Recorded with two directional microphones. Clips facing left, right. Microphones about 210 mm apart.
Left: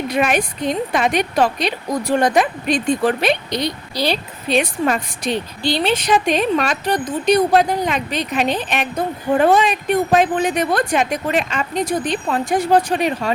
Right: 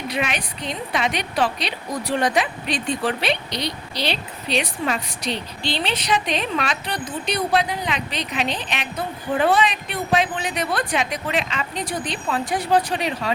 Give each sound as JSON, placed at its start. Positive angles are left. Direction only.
{"t": 0.1, "sound": "a woman's voice", "side_deg": 50}